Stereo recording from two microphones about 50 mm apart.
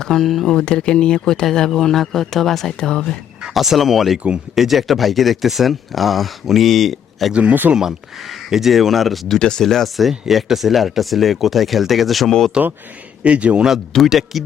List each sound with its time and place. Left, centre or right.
0.0 s a man's voice: centre
0.4 s a man's voice: centre
2.7 s a man's voice: centre
3.4 s speech: centre
7.3 s speech: right
7.8 s speech: centre
9.4 s speech: centre
12.6 s speech: centre
14.1 s speech: centre